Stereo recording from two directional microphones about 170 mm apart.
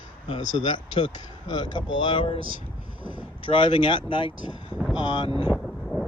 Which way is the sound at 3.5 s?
30° left (ahead or behind).